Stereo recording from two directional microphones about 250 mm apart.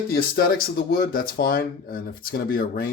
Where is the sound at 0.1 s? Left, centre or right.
Left.